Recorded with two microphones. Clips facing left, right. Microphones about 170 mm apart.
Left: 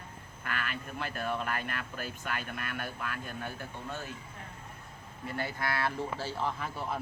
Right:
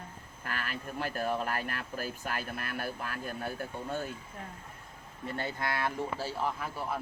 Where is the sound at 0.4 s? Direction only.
40° right (ahead or behind).